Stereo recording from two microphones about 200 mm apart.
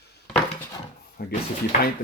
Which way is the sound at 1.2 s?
50° left (ahead or behind).